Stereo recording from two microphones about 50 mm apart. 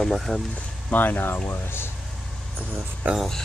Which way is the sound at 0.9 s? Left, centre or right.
Left.